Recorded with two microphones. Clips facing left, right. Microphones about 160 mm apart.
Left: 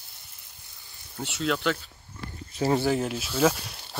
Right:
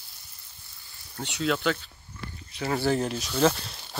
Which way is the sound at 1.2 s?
Centre (ahead or behind).